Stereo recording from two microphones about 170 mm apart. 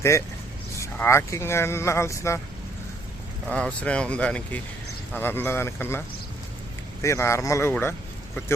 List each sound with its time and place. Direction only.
0.8 s speech: 15° left (ahead or behind)
3.5 s speech: 5° left (ahead or behind)
7.0 s speech: 15° left (ahead or behind)